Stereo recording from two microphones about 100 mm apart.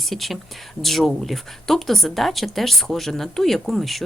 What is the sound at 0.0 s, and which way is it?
Speech, centre (ahead or behind).